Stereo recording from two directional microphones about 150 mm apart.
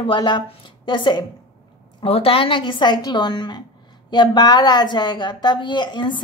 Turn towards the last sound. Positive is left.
turn(degrees=30)  # may be behind; listen again after turning